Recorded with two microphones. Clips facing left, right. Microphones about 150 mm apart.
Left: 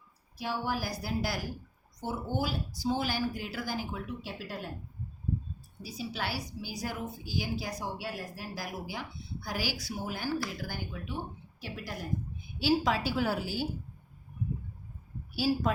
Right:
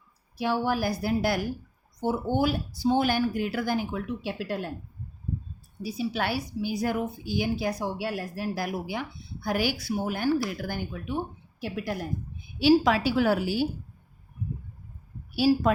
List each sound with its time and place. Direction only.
0.3 s a woman's voice: 70° right (ahead or behind)
5.8 s a woman's voice: 60° right (ahead or behind)
12.5 s a woman's voice: 70° right (ahead or behind)
15.4 s a woman's voice: 70° right (ahead or behind)